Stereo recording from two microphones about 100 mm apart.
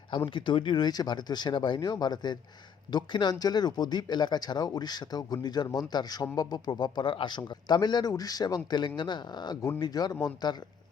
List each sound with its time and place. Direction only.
0.3 s speech: 55° left (ahead or behind)